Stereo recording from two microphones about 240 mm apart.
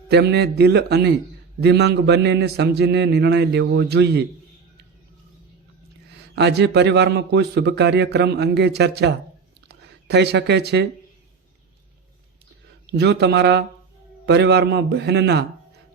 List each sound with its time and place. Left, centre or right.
0.1 s a man's voice: right
6.3 s a man's voice: right
12.9 s a man's voice: right